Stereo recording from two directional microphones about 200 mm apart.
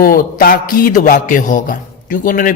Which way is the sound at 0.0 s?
45° left (ahead or behind).